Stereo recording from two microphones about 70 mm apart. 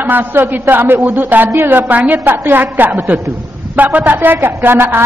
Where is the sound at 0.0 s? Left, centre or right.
Right.